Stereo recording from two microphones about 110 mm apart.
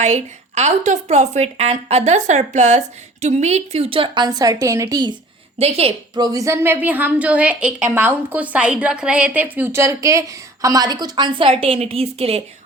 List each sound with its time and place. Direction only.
0.0 s a woman's voice: 90° right; by 5.1 s 35° right (ahead or behind)
5.5 s a woman's voice: 65° right (ahead or behind)
6.1 s a woman's voice: 35° right (ahead or behind); by 12.4 s 60° right (ahead or behind)